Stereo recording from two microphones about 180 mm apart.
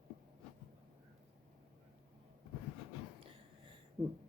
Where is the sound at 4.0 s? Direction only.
30° right (ahead or behind).